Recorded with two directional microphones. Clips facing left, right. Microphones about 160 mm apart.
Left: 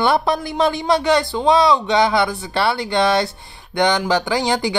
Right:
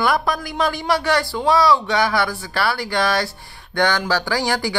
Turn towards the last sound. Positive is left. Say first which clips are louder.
# left 2 dB
turn(degrees=20)  # may be behind; listen again after turning